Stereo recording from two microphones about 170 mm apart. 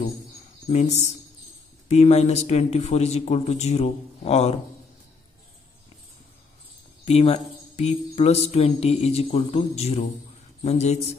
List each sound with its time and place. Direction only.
0.7 s speech: 40° left (ahead or behind)
7.1 s speech: 40° left (ahead or behind)